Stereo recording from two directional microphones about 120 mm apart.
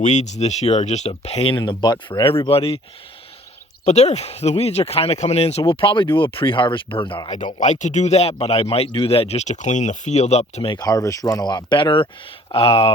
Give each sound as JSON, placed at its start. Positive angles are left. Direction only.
{"t": 0.0, "sound": "speech", "side_deg": 75}
{"t": 3.8, "sound": "speech", "side_deg": 65}
{"t": 7.6, "sound": "speech", "side_deg": 85}
{"t": 10.7, "sound": "speech", "side_deg": 35}